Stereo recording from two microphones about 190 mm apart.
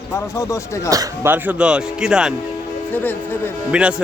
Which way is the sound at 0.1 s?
15° left (ahead or behind).